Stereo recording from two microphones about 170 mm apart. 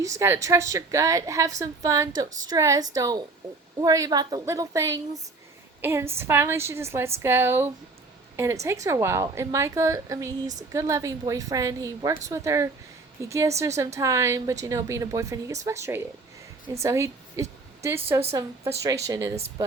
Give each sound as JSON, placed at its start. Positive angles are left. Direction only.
{"t": 0.0, "sound": "a woman's voice", "side_deg": -15}